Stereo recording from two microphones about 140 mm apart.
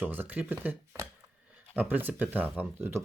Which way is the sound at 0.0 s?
15° right (ahead or behind).